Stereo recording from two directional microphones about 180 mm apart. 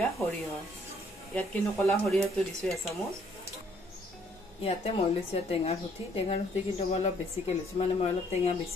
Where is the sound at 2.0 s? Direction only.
Centre (ahead or behind).